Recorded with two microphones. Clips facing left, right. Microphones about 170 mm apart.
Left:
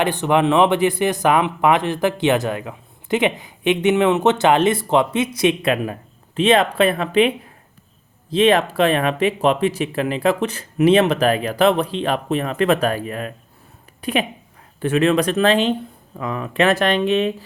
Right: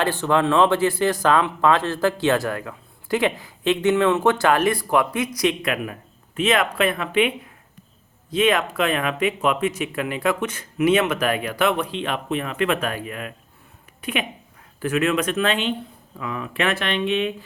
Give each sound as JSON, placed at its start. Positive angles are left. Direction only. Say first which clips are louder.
{"t": 0.0, "sound": "speech", "louder": "left 3 dB", "side_deg": 20}